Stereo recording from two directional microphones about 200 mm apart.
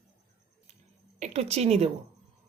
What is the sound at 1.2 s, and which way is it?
Speech, 30° right (ahead or behind).